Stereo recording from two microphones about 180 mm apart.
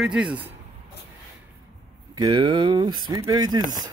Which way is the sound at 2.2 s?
25° right (ahead or behind).